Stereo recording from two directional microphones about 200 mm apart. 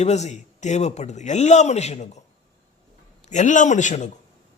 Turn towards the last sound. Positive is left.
turn(degrees=35)  # may be behind; listen again after turning